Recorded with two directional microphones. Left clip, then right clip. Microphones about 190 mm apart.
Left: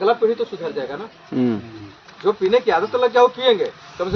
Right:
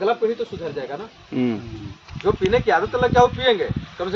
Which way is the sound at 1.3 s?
15° left (ahead or behind).